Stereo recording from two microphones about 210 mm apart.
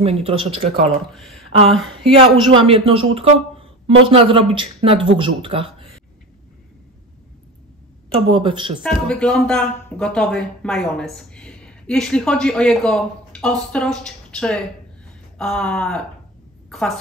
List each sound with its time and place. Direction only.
0.0 s a man's voice: 30° right (ahead or behind)
2.1 s a man's voice: 25° right (ahead or behind)
8.3 s a man's voice: 25° right (ahead or behind)
8.8 s speech: 5° left (ahead or behind)